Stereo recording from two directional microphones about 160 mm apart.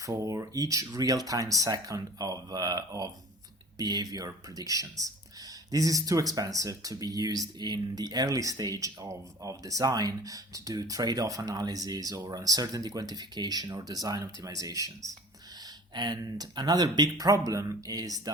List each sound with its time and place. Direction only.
0.0 s speech: 20° right (ahead or behind)